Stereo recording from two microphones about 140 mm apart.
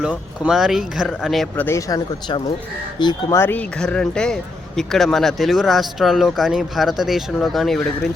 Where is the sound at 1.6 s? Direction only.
20° left (ahead or behind).